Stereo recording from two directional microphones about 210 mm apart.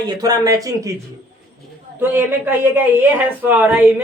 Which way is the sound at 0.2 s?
15° right (ahead or behind).